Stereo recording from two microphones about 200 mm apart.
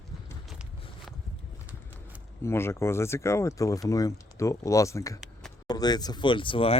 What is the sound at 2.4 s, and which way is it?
Speech, 10° left (ahead or behind).